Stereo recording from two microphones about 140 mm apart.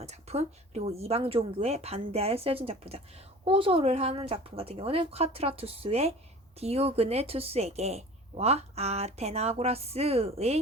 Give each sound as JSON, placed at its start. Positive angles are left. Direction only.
{"t": 0.0, "sound": "a woman's voice", "side_deg": -50}